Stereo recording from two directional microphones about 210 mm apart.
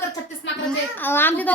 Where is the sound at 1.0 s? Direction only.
10° left (ahead or behind).